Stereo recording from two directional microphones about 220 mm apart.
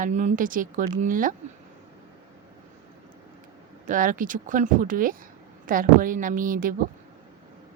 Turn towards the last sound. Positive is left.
turn(degrees=-40)  # may be behind; listen again after turning